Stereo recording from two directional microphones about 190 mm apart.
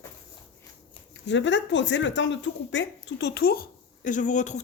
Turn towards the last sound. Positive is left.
turn(degrees=40)  # may be behind; listen again after turning